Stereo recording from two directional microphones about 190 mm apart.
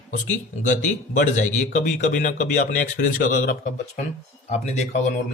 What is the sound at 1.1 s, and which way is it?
A man's voice, 40° left (ahead or behind).